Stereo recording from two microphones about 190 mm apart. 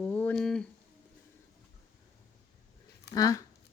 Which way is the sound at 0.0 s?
10° left (ahead or behind).